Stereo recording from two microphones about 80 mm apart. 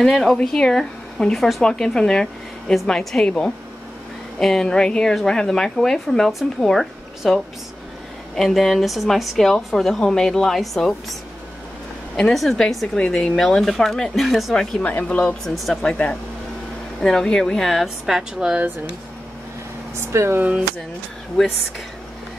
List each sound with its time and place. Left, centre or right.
0.0 s a woman's voice: centre
12.2 s a woman's voice: centre
14.8 s speech: centre
15.4 s a woman's voice: centre
20.0 s speech: right